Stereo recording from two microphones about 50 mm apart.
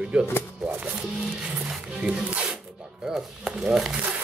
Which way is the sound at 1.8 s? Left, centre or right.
Centre.